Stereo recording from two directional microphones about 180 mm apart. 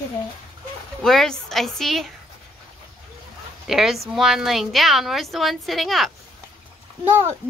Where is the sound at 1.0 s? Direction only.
Centre (ahead or behind).